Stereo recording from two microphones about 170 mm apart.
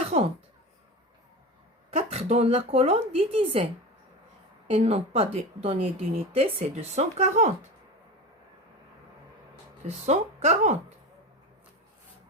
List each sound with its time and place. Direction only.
0.1 s speech: 40° right (ahead or behind)
1.9 s a woman's voice: 40° right (ahead or behind)
4.7 s a woman's voice: 40° right (ahead or behind)
10.1 s a woman's voice: 40° right (ahead or behind)